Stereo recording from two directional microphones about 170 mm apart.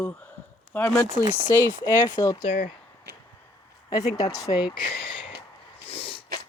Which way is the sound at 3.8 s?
20° left (ahead or behind).